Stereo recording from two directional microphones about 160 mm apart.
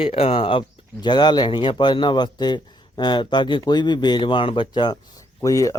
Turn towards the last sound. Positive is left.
turn(degrees=20)  # may be behind; listen again after turning